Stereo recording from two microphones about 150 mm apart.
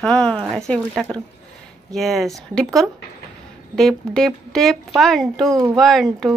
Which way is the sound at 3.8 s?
5° left (ahead or behind).